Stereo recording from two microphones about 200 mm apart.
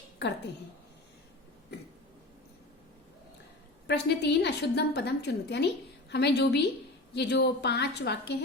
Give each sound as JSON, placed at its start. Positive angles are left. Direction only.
{"t": 3.8, "sound": "a woman's voice", "side_deg": 55}